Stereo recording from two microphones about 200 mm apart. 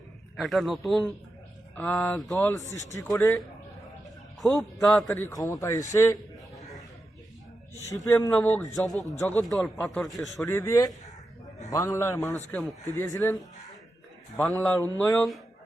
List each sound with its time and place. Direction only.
0.3 s speech: centre (ahead or behind)
2.9 s a man's voice: 15° left (ahead or behind)
4.4 s a man's voice: centre (ahead or behind)
5.0 s a man's voice: 15° left (ahead or behind)
7.9 s a man's voice: 15° left (ahead or behind); by 10.4 s centre (ahead or behind)
10.4 s a man's voice: 15° left (ahead or behind)
13.1 s a man's voice: 15° left (ahead or behind)
14.3 s a man's voice: 5° left (ahead or behind)